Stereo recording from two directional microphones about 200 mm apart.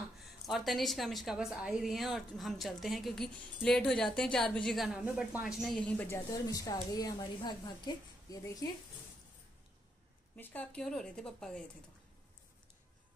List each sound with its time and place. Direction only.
0.2 s a woman's voice: centre (ahead or behind)
6.3 s a woman's voice: 20° left (ahead or behind)
10.3 s a woman's voice: 10° left (ahead or behind)